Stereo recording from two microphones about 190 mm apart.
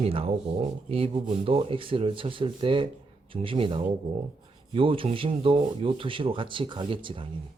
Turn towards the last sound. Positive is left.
turn(degrees=-25)  # may be behind; listen again after turning